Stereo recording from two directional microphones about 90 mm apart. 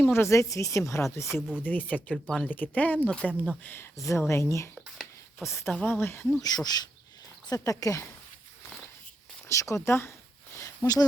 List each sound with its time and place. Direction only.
0.0 s speech: 30° left (ahead or behind)
1.3 s speech: 5° right (ahead or behind)
1.6 s speech: 20° left (ahead or behind)
2.5 s speech: 20° left (ahead or behind)
3.1 s speech: 10° left (ahead or behind)
3.6 s speech: 25° left (ahead or behind)
3.9 s a woman's voice: 35° left (ahead or behind)
5.7 s speech: 20° left (ahead or behind)
6.5 s speech: 45° left (ahead or behind)
9.5 s speech: 35° left (ahead or behind)
10.6 s a sound: 45° left (ahead or behind)